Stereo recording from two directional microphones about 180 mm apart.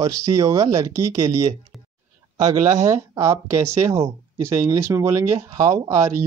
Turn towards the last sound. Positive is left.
turn(degrees=-15)  # may be behind; listen again after turning